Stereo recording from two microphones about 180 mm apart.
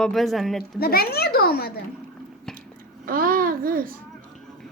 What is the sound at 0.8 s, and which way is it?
Speech, 60° left (ahead or behind).